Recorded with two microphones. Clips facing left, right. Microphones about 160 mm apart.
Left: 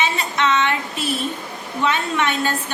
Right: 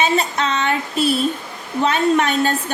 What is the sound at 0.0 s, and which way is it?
A woman's voice, 35° right (ahead or behind).